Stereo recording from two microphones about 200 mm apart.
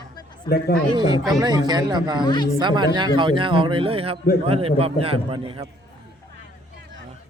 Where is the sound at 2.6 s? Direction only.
20° right (ahead or behind).